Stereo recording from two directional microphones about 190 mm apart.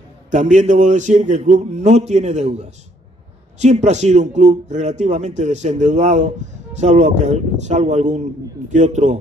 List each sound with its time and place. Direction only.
0.3 s speech: 40° right (ahead or behind)